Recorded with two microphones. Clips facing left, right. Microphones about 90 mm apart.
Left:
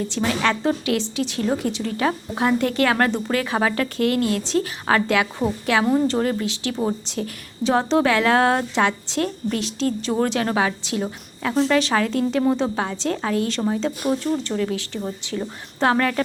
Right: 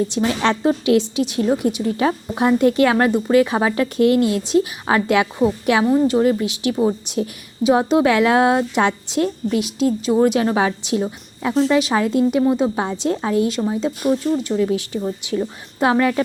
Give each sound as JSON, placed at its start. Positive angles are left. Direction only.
{"t": 0.1, "sound": "a woman's voice", "side_deg": -20}
{"t": 11.7, "sound": "a woman's voice", "side_deg": -10}
{"t": 11.9, "sound": "a woman's voice", "side_deg": -20}
{"t": 12.5, "sound": "a woman's voice", "side_deg": -10}
{"t": 12.7, "sound": "a woman's voice", "side_deg": -20}
{"t": 13.7, "sound": "a woman's voice", "side_deg": -10}
{"t": 14.6, "sound": "a woman's voice", "side_deg": -25}